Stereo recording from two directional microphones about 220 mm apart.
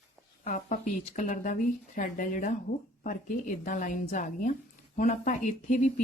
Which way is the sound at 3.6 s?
35° left (ahead or behind).